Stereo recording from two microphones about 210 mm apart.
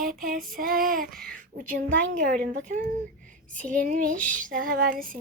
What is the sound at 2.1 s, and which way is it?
A child's voice, 40° right (ahead or behind).